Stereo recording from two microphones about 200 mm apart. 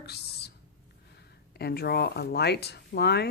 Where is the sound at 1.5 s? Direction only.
50° left (ahead or behind).